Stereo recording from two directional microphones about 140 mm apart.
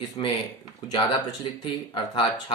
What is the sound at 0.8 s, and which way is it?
Speech, 30° left (ahead or behind).